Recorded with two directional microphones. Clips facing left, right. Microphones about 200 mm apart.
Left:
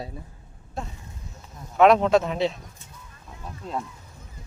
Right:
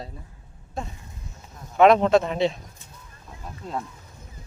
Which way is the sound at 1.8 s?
Centre (ahead or behind).